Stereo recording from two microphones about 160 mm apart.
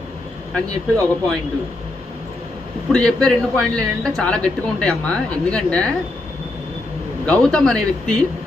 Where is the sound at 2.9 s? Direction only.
5° left (ahead or behind).